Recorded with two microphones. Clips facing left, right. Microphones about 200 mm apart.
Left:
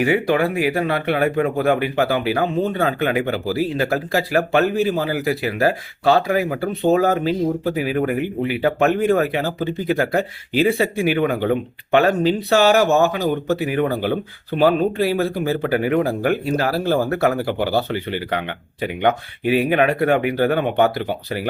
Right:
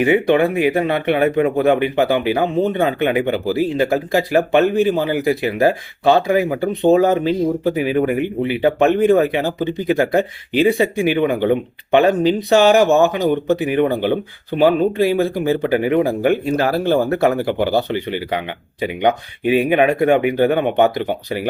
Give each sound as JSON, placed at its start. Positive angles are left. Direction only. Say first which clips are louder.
{"t": 0.0, "sound": "speech", "louder": "right 4 dB", "side_deg": -20}